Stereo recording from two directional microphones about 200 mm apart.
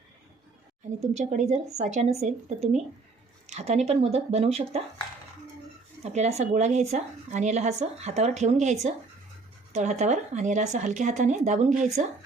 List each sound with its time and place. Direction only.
1.1 s speech: 35° right (ahead or behind)
6.0 s speech: 35° right (ahead or behind)